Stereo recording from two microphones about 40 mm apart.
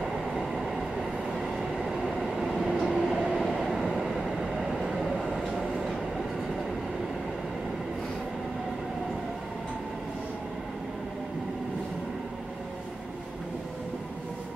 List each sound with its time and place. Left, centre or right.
1.6 s train: centre